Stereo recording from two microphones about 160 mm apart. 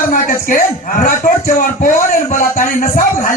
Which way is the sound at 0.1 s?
60° left (ahead or behind).